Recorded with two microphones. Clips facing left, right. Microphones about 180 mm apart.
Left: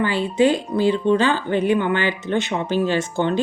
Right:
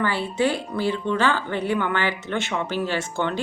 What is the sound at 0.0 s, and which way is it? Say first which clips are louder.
Speech: left 5 dB; 15° left (ahead or behind).